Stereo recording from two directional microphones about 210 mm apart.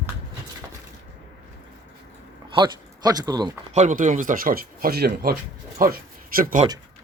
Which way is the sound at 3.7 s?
35° right (ahead or behind).